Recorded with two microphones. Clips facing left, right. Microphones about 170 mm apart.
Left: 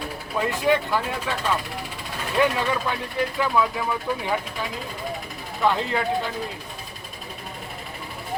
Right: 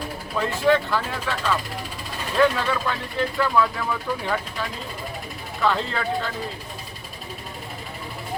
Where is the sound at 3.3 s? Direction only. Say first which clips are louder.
Right 2 dB; 5° left (ahead or behind).